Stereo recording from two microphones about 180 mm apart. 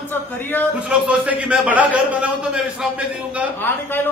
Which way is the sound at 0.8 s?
5° right (ahead or behind).